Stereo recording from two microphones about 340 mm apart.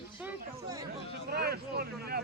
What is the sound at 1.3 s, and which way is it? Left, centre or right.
Speech, right.